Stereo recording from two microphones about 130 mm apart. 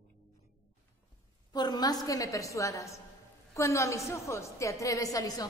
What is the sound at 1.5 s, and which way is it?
A woman's voice, 30° left (ahead or behind).